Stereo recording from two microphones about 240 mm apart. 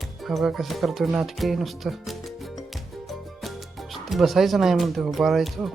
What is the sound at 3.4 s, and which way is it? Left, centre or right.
Speech, centre.